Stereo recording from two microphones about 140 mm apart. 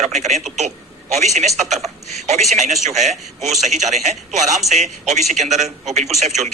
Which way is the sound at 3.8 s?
60° right (ahead or behind).